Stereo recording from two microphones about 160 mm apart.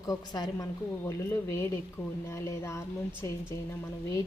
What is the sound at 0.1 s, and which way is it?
A woman's voice, 20° left (ahead or behind).